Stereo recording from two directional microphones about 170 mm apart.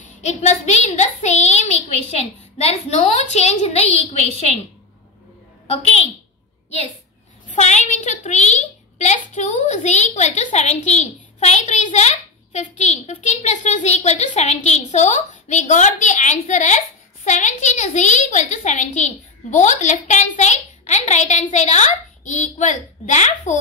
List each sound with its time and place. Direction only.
0.0 s a child's voice: 45° left (ahead or behind)
7.5 s a child's voice: 40° left (ahead or behind)